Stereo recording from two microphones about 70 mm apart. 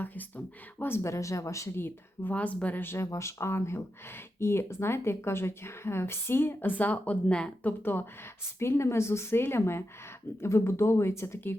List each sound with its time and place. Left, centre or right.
0.0 s speech: left
2.3 s speech: centre
7.8 s speech: left